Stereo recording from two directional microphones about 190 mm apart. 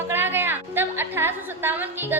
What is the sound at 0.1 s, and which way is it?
A woman's voice, 10° right (ahead or behind).